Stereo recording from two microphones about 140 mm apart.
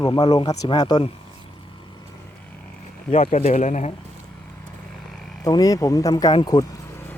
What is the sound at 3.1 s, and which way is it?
Speech, 45° left (ahead or behind).